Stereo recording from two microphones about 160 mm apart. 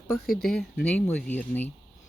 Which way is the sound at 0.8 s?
5° left (ahead or behind).